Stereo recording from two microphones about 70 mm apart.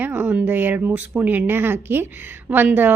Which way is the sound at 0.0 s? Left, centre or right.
Right.